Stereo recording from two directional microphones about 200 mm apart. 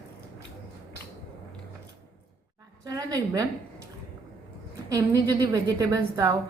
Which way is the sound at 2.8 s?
15° right (ahead or behind).